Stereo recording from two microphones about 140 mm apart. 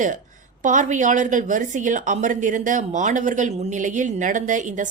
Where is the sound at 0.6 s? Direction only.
65° right (ahead or behind).